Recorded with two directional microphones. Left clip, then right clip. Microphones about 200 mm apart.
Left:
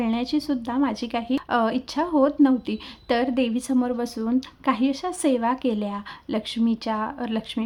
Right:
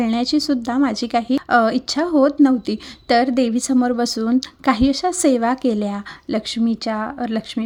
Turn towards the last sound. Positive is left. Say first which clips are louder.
# right 5 dB
turn(degrees=-10)  # may be behind; listen again after turning